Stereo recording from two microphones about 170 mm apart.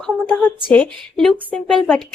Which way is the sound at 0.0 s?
5° left (ahead or behind).